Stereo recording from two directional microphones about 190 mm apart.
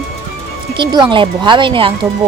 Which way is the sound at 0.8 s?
25° right (ahead or behind).